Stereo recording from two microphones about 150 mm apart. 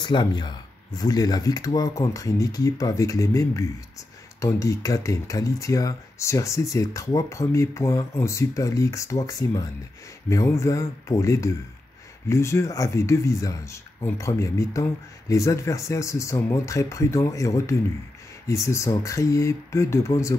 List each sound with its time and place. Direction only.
0.0 s speech: 30° left (ahead or behind)